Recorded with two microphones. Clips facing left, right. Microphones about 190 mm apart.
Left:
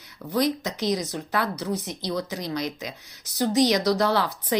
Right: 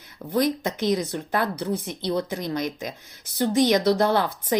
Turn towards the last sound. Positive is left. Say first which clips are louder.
# right 2 dB
turn(degrees=-50)  # may be behind; listen again after turning